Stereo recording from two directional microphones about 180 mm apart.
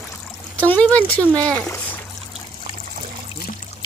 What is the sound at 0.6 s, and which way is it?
Speech, 10° left (ahead or behind).